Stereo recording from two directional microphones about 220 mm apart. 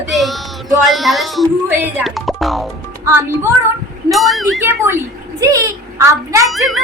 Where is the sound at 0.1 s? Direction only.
Centre (ahead or behind).